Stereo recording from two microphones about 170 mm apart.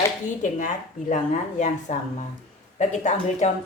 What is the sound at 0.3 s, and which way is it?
Speech, 45° left (ahead or behind).